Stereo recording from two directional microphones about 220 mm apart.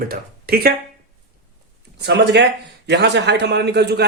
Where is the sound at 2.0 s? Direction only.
50° right (ahead or behind).